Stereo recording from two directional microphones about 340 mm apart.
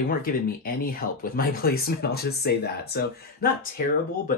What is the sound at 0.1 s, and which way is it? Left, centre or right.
Speech, left.